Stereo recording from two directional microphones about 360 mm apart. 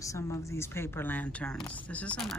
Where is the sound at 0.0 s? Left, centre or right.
Centre.